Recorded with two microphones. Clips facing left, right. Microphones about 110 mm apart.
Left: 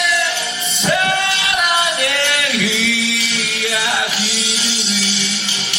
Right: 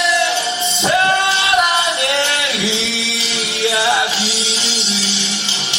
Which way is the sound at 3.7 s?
25° right (ahead or behind).